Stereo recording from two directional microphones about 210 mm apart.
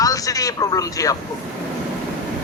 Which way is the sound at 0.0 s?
15° left (ahead or behind).